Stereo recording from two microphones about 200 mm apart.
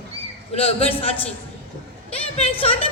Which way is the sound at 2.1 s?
30° left (ahead or behind).